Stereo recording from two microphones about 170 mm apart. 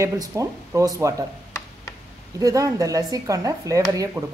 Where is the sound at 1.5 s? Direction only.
15° left (ahead or behind).